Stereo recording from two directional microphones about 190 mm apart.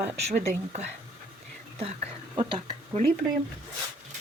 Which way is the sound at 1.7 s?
30° right (ahead or behind).